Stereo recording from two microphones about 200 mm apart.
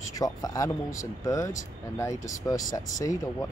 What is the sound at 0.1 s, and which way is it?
Speech, 20° left (ahead or behind).